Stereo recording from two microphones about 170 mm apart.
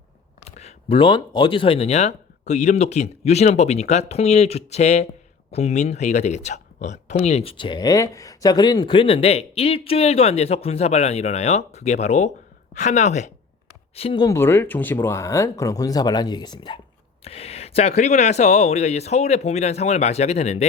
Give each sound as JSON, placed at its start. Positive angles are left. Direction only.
{"t": 0.4, "sound": "speech", "side_deg": 35}
{"t": 13.9, "sound": "speech", "side_deg": 30}
{"t": 14.3, "sound": "speech", "side_deg": 15}